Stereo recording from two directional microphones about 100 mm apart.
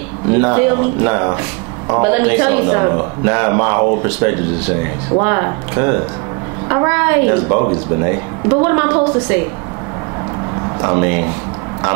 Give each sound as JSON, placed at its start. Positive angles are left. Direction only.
{"t": 0.3, "sound": "speech", "side_deg": -15}
{"t": 10.8, "sound": "speech", "side_deg": -20}